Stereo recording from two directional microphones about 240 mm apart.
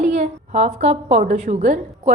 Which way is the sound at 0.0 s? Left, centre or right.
Right.